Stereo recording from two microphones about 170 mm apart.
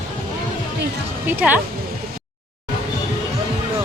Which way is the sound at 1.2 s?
10° right (ahead or behind).